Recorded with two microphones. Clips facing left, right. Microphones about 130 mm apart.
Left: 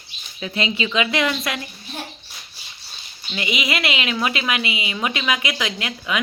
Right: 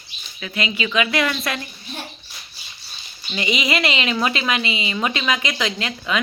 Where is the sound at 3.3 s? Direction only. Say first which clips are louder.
Right 2 dB; 5° left (ahead or behind).